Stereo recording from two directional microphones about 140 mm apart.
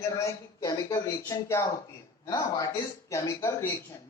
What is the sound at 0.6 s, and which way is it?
A man's voice, 25° left (ahead or behind).